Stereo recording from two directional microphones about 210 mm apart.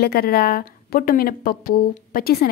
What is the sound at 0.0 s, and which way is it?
Speech, 45° left (ahead or behind).